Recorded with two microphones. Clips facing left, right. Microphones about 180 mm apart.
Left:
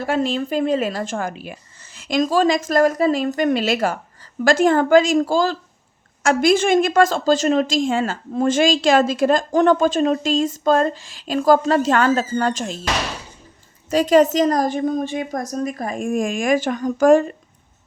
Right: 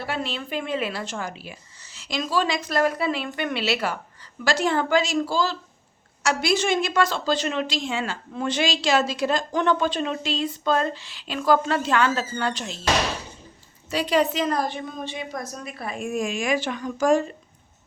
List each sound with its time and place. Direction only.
0.0 s a woman's voice: 45° left (ahead or behind)
13.9 s a woman's voice: 45° left (ahead or behind)